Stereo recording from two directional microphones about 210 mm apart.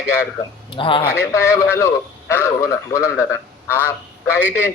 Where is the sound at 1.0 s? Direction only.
10° left (ahead or behind).